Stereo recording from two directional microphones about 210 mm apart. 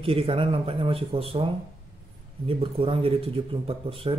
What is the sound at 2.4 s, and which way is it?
Speech, 25° right (ahead or behind).